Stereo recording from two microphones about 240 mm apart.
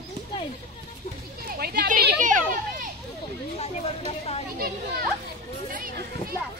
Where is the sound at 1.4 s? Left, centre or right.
Right.